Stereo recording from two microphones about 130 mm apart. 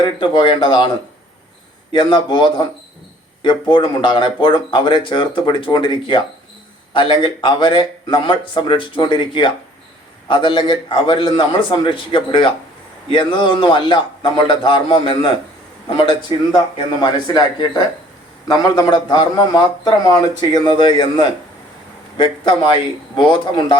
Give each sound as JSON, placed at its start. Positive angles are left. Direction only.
{"t": 0.2, "sound": "speech", "side_deg": 40}
{"t": 1.9, "sound": "speech", "side_deg": 35}
{"t": 16.3, "sound": "speech", "side_deg": 45}